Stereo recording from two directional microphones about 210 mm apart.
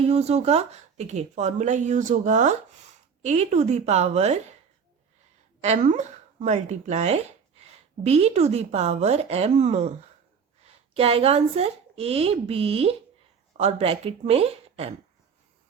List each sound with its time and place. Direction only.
0.0 s speech: 30° right (ahead or behind)
5.6 s speech: 35° right (ahead or behind)
10.9 s speech: 30° right (ahead or behind)